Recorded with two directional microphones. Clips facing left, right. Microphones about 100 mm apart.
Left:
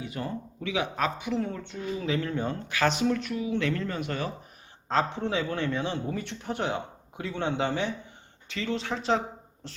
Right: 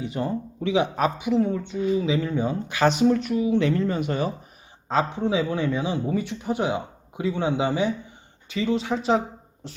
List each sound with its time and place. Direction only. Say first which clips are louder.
0.0 s speech: right 7 dB; 25° right (ahead or behind); by 2.6 s 5° right (ahead or behind)
2.6 s speech: right 6 dB; 20° right (ahead or behind)
4.9 s speech: right 4 dB; 5° right (ahead or behind)